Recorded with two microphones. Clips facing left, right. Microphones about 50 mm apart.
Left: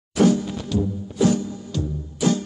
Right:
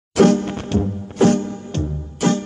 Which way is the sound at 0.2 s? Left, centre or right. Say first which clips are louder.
Right 4 dB; right.